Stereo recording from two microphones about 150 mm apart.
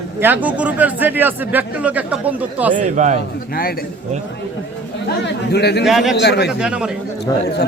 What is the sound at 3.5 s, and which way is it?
Speech, 80° left.